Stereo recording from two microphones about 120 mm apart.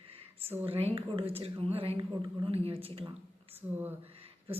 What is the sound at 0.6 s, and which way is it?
Speech, 55° right (ahead or behind).